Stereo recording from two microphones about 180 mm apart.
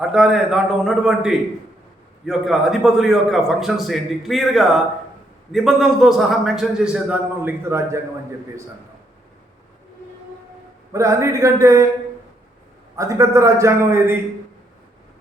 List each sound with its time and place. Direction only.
0.0 s a man's voice: 5° right (ahead or behind)
10.9 s a man's voice: 15° right (ahead or behind)
13.0 s a man's voice: 15° right (ahead or behind)